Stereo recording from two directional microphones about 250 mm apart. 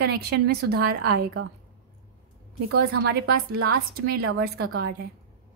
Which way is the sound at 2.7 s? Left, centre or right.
Right.